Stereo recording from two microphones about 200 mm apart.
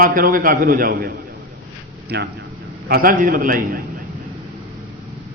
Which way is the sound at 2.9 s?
45° right (ahead or behind).